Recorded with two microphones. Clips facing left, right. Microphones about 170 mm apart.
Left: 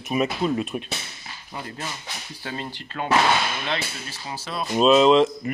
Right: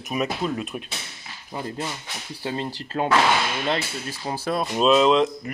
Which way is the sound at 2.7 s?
35° right (ahead or behind).